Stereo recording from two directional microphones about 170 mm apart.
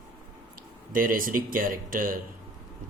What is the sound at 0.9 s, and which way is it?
Speech, 55° right (ahead or behind).